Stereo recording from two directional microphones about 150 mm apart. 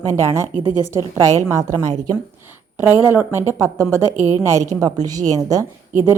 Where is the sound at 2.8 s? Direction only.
15° right (ahead or behind).